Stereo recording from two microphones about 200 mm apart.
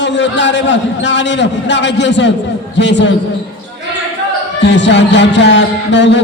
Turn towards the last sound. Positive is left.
turn(degrees=60)  # may be behind; listen again after turning